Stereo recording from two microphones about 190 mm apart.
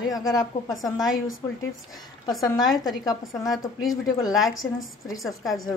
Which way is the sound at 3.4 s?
Centre (ahead or behind).